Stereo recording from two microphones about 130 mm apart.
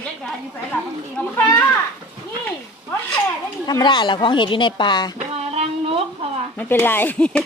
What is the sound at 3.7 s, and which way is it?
Speech, 30° left (ahead or behind).